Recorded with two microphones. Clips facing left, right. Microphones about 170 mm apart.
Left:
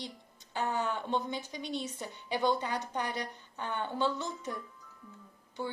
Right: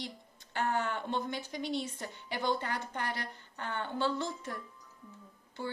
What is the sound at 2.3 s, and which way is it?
A woman's voice, 20° left (ahead or behind).